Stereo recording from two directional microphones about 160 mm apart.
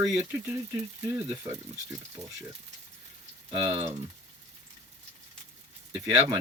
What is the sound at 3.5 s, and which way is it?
Speech, 35° right (ahead or behind).